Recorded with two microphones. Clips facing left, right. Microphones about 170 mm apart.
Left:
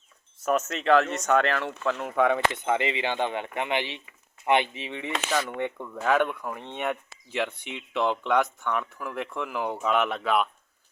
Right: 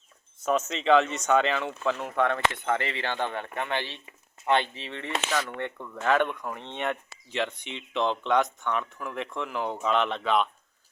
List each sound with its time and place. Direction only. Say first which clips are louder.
0.3 s speech: left 1 dB; centre (ahead or behind)